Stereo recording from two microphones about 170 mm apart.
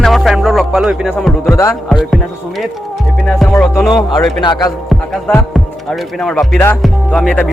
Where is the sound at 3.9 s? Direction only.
25° left (ahead or behind).